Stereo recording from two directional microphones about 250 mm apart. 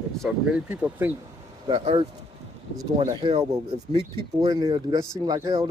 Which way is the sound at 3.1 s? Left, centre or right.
Centre.